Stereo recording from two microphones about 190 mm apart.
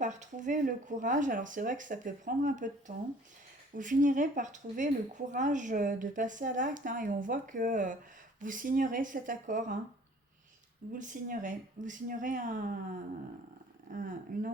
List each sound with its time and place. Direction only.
0.0 s speech: 40° right (ahead or behind)
10.9 s speech: 40° right (ahead or behind)
13.9 s speech: 45° right (ahead or behind)